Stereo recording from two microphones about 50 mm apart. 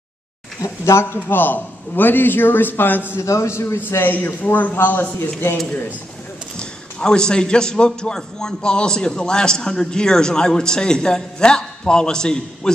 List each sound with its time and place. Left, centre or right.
0.6 s speech: left
1.3 s a man's voice: left
3.2 s a man's voice: left
3.6 s a man's voice: left
4.1 s a man's voice: left
6.5 s a man's voice: centre